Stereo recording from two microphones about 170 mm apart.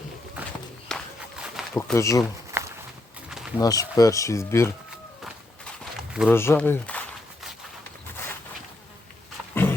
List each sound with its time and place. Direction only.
0.4 s walk: 5° right (ahead or behind)
1.7 s speech: 15° left (ahead or behind)
2.5 s walk: 15° right (ahead or behind)
3.2 s wild animals: 5° right (ahead or behind)
3.6 s speech: 20° left (ahead or behind)
5.8 s a sound: centre (ahead or behind)
6.3 s speech: 15° left (ahead or behind)